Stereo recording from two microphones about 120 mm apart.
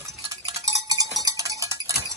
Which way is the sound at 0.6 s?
30° right (ahead or behind).